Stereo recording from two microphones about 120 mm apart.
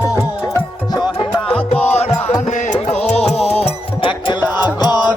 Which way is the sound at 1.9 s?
65° left (ahead or behind).